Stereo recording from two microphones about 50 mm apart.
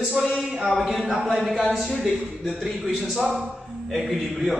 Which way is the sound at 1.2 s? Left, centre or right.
Centre.